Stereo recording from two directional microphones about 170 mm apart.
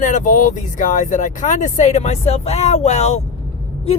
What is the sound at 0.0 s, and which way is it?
Speech, 50° left (ahead or behind).